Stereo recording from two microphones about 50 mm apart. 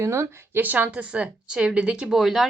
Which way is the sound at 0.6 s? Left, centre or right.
Right.